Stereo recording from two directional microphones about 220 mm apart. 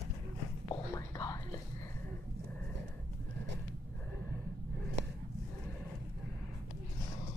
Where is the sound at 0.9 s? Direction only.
15° left (ahead or behind).